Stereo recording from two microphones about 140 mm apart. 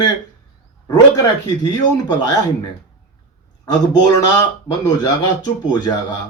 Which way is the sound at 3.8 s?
30° left (ahead or behind).